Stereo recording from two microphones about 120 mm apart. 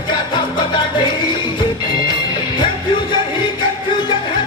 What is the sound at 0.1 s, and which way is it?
Music, 40° left (ahead or behind).